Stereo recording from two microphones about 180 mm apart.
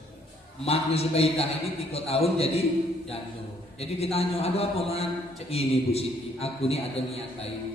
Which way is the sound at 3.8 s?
35° left (ahead or behind).